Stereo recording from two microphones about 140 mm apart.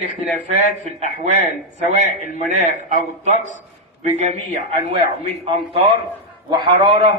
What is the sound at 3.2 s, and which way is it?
Speech, 60° right (ahead or behind).